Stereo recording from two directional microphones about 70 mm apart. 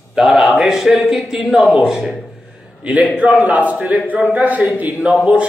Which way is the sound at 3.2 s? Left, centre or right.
Centre.